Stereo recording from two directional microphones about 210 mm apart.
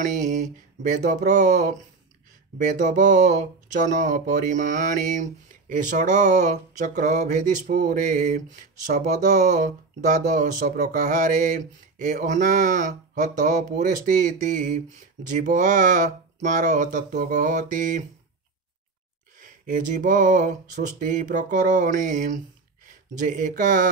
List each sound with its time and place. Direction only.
0.0 s speech: 35° right (ahead or behind)
19.4 s speech: 40° right (ahead or behind)